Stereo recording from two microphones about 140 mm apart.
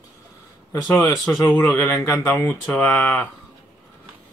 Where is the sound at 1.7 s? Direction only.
20° left (ahead or behind).